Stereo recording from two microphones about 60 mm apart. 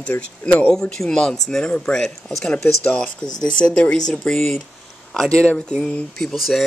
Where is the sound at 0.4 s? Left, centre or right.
Left.